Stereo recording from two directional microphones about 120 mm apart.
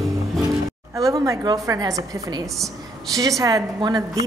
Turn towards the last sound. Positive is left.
turn(degrees=-30)  # may be behind; listen again after turning